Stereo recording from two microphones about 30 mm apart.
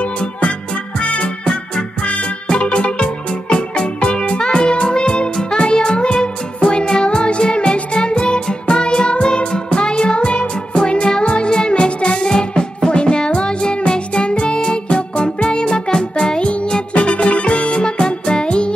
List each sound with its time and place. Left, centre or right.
0.0 s music: left
2.4 s music: left
16.3 s music: left